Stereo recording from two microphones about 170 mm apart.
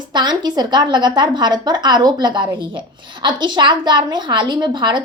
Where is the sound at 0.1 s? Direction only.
25° right (ahead or behind).